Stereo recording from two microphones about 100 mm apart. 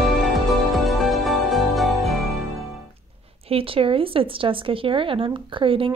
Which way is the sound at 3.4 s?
70° right (ahead or behind).